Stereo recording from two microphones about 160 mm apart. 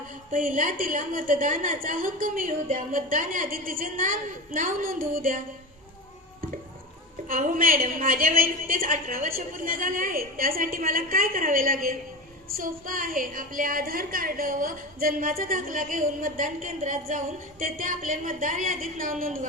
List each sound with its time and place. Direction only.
0.3 s a woman's voice: 55° right (ahead or behind)
7.3 s a woman's voice: 60° right (ahead or behind)